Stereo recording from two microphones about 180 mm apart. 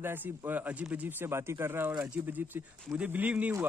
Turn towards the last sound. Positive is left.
turn(degrees=-10)  # may be behind; listen again after turning